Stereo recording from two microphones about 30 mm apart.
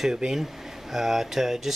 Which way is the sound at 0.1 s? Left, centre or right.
Right.